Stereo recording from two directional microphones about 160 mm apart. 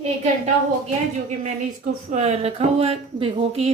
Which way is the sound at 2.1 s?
45° right (ahead or behind).